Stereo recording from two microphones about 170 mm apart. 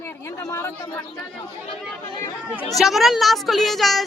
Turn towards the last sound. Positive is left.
turn(degrees=0)  # may be behind; listen again after turning